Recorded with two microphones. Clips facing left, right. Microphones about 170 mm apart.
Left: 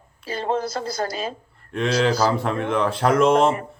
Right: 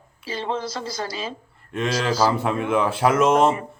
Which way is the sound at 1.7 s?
Centre (ahead or behind).